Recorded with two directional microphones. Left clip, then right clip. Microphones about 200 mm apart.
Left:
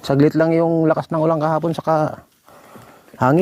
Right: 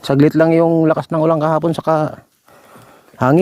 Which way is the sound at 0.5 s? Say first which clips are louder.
Right 3 dB; 40° right (ahead or behind).